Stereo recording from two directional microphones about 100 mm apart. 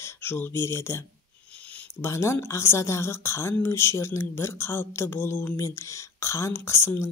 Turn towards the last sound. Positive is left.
turn(degrees=25)  # may be behind; listen again after turning